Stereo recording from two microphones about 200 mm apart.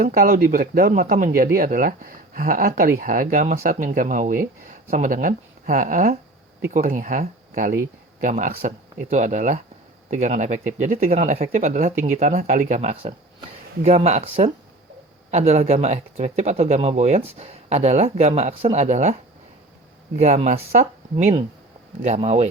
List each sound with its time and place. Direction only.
0.0 s speech: 45° right (ahead or behind)
15.3 s speech: 35° right (ahead or behind)
20.1 s speech: 35° right (ahead or behind)